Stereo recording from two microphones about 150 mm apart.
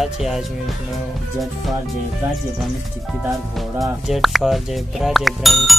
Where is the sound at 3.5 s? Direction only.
Centre (ahead or behind).